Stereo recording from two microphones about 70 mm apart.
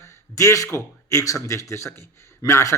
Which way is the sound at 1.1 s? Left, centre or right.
Left.